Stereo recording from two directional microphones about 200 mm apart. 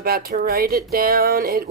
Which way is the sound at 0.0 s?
50° right (ahead or behind).